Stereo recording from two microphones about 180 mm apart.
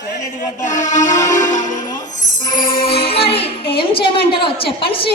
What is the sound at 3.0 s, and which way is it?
A woman's voice, 30° left (ahead or behind).